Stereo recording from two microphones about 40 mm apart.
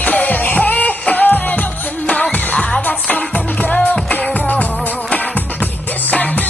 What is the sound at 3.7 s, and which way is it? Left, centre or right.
Music, left.